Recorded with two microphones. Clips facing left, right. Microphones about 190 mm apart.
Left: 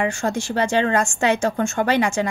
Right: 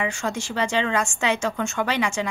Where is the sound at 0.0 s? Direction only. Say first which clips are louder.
Left 4 dB; 50° left (ahead or behind).